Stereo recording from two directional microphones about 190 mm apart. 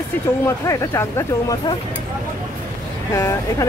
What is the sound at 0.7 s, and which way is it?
Speech, 15° left (ahead or behind).